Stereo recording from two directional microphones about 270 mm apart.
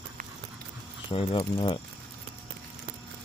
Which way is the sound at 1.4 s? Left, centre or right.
Centre.